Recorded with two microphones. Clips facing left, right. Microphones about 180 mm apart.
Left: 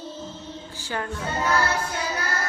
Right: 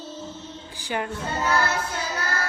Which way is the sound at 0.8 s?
15° right (ahead or behind).